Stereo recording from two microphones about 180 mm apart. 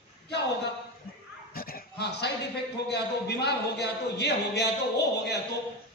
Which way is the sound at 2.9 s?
65° left (ahead or behind).